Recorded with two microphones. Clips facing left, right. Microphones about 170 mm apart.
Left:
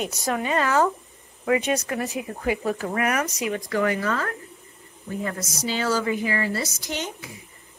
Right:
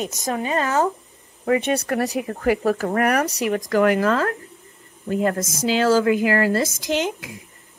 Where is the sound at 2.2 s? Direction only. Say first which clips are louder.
Right 5 dB; 50° right (ahead or behind).